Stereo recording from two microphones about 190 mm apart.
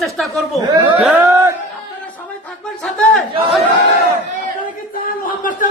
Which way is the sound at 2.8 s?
Centre (ahead or behind).